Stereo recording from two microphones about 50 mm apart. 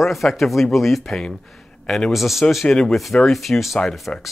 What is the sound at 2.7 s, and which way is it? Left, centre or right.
Speech, centre.